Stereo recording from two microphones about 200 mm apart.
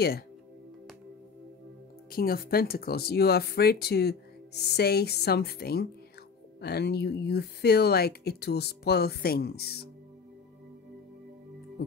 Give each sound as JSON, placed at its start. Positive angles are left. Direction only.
{"t": 2.0, "sound": "speech", "side_deg": 50}